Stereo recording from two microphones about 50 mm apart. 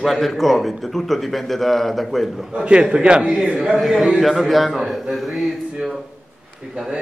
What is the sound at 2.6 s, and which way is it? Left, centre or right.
A man's voice, right.